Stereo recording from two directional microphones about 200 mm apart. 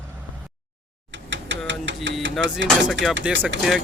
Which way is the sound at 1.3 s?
65° right (ahead or behind).